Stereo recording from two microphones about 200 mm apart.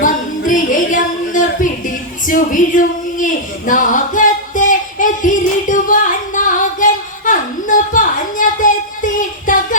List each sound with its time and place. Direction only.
0.0 s music: 40° left (ahead or behind)
2.2 s speech: 40° left (ahead or behind)